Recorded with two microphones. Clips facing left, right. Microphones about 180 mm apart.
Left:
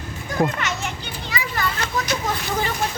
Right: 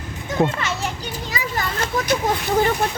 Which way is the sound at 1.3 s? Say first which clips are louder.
Left 1 dB; 45° right (ahead or behind).